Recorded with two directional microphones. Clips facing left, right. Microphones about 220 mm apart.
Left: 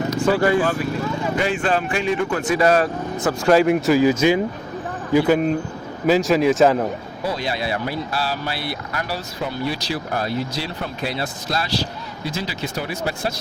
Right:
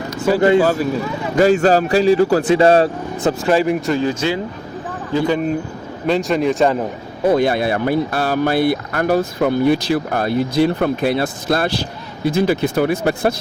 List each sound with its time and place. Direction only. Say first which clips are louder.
0.3 s speech: right 4 dB; 10° right (ahead or behind)
0.6 s speech: right 5 dB; 40° right (ahead or behind)
3.4 s a man's voice: left 3 dB; centre (ahead or behind)
7.3 s speech: right 9 dB; 55° right (ahead or behind)